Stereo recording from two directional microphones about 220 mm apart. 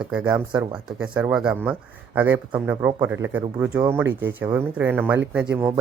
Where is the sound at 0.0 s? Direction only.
5° right (ahead or behind).